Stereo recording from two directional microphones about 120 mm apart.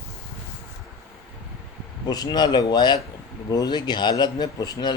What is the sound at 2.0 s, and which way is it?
Speech, 35° left (ahead or behind).